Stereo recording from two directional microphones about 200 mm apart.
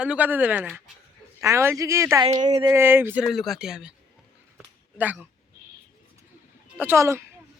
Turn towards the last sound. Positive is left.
turn(degrees=-15)  # may be behind; listen again after turning